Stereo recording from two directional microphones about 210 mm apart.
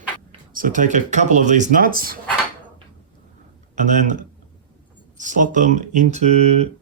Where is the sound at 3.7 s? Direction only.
35° right (ahead or behind).